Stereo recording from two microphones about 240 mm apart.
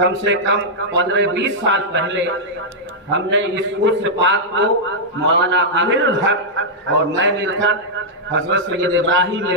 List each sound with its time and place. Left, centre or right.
0.0 s a man's voice: right